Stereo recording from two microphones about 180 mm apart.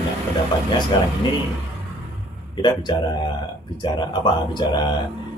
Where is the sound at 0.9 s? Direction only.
25° left (ahead or behind).